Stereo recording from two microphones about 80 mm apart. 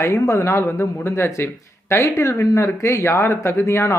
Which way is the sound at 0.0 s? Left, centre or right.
Left.